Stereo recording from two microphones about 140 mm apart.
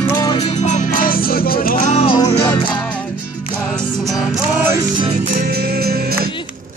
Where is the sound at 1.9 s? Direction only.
40° left (ahead or behind).